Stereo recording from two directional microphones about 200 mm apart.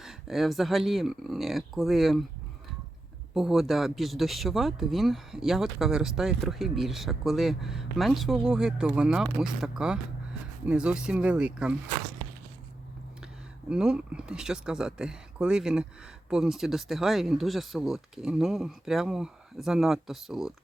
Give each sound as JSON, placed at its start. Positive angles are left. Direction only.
{"t": 0.0, "sound": "speech", "side_deg": 0}
{"t": 3.3, "sound": "speech", "side_deg": 0}
{"t": 13.7, "sound": "speech", "side_deg": -5}